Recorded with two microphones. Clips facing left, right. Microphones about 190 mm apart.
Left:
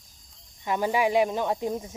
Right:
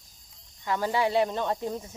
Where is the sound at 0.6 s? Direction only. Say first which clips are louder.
Left 2 dB; 15° left (ahead or behind).